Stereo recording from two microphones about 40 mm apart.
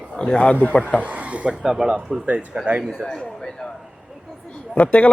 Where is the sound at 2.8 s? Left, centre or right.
Centre.